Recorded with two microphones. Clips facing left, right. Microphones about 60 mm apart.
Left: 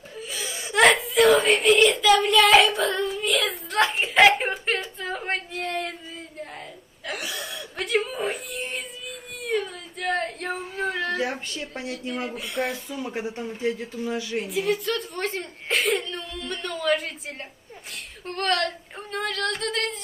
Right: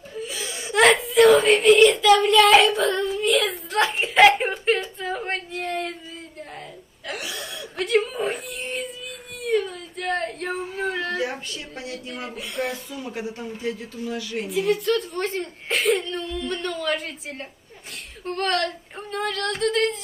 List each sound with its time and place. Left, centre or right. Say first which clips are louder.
0.1 s speech: right 2 dB; centre
7.1 s speech: even; centre
9.4 s a sound: right 4 dB; centre
11.1 s speech: even; left
12.3 s speech: right 3 dB; centre
12.9 s speech: left 1 dB; left
14.4 s speech: right 5 dB; centre